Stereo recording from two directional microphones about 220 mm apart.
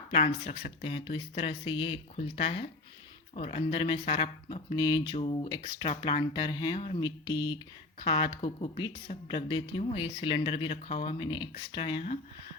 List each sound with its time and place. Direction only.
0.1 s speech: 25° left (ahead or behind)